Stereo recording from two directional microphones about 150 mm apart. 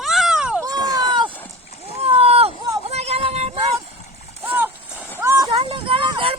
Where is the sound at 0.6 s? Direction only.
25° right (ahead or behind).